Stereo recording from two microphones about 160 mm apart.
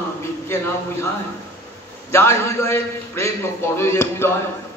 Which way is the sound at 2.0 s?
15° left (ahead or behind).